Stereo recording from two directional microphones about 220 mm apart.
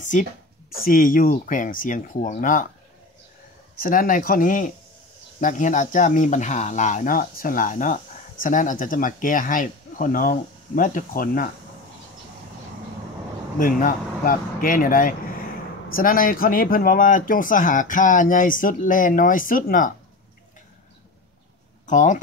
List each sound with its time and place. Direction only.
0.0 s speech: 35° left (ahead or behind)
3.8 s speech: 40° left (ahead or behind)
13.6 s speech: 40° left (ahead or behind)
21.8 s speech: 35° left (ahead or behind)